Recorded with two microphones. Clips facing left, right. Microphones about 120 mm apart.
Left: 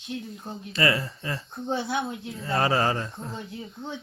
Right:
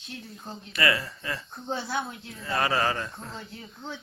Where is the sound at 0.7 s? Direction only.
25° left (ahead or behind).